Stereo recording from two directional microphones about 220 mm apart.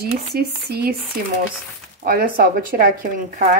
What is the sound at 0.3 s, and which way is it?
Speech, 50° right (ahead or behind).